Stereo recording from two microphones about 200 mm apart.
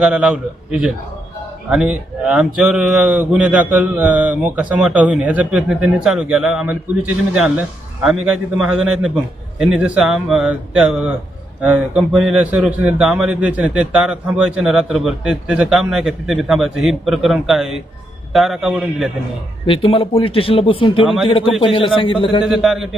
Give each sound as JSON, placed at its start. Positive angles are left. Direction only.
{"t": 0.0, "sound": "a man's voice", "side_deg": -5}
{"t": 19.6, "sound": "speech", "side_deg": 25}
{"t": 22.4, "sound": "a man's voice", "side_deg": 0}